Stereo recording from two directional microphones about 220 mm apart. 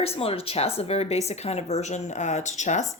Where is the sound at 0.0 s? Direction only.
25° left (ahead or behind).